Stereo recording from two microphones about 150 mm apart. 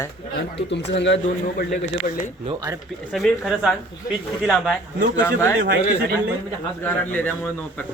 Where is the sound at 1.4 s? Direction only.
60° left (ahead or behind).